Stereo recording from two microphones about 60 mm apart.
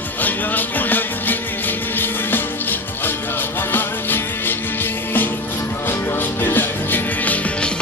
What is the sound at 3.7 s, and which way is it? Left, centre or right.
Music, left.